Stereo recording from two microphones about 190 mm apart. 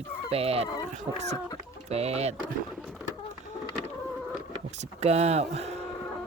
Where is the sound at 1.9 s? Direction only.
35° right (ahead or behind).